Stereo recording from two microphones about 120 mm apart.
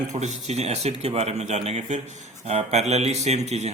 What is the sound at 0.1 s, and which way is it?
A man's voice, 75° right (ahead or behind).